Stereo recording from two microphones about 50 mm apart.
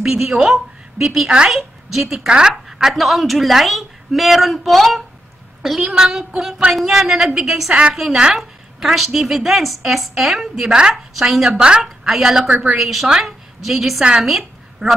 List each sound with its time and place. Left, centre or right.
0.0 s a woman's voice: centre
2.1 s a woman's voice: centre
2.5 s a woman's voice: centre
5.8 s a woman's voice: centre
10.7 s a woman's voice: centre
14.2 s a sound: centre